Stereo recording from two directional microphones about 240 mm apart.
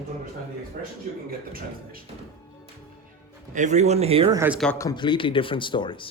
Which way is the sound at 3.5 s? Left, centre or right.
Right.